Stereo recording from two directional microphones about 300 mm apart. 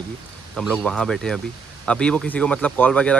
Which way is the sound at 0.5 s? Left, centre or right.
Centre.